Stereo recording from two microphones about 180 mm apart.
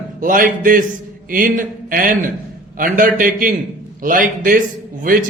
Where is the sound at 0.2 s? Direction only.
50° right (ahead or behind).